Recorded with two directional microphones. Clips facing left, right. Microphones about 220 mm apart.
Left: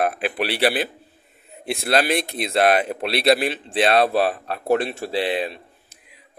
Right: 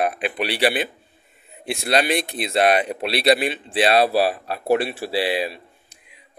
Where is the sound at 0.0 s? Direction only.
Centre (ahead or behind).